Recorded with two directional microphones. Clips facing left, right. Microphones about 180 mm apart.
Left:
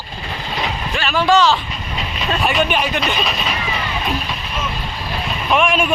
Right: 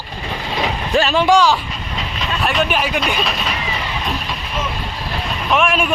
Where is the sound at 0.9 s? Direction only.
30° right (ahead or behind).